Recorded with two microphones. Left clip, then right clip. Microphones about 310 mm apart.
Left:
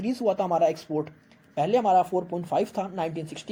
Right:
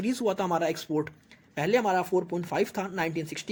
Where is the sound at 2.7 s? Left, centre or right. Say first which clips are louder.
Left 1 dB; right.